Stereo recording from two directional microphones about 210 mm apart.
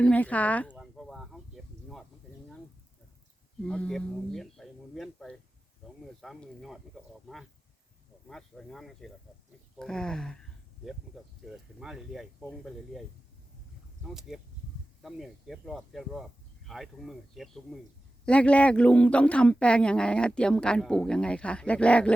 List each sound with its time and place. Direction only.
0.0 s speech: 5° left (ahead or behind)
0.7 s a sound: centre (ahead or behind)
3.6 s speech: 5° left (ahead or behind)
14.1 s speech: centre (ahead or behind)